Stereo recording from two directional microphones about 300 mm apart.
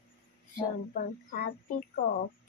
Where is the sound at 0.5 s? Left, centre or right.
Left.